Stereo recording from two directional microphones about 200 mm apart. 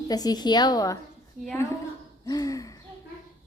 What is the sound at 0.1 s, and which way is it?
Speech, 20° left (ahead or behind).